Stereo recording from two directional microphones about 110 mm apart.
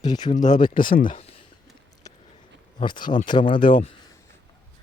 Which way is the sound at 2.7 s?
45° left (ahead or behind).